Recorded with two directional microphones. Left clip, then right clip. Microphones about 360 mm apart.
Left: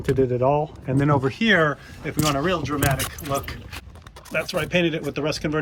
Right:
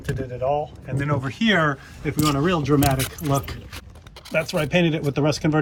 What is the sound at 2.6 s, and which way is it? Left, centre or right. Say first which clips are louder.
Speech: right 3 dB; centre.